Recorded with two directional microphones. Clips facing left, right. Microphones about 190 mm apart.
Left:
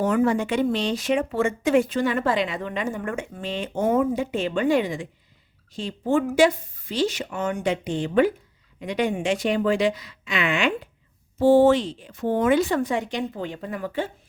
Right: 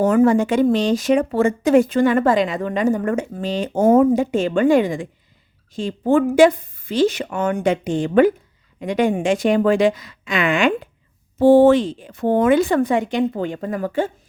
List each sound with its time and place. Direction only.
0.0 s speech: 45° right (ahead or behind)